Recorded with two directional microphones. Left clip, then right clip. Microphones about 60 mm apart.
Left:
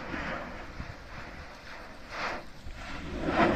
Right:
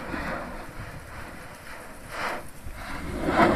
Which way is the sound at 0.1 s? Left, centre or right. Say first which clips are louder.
Right 4 dB; centre.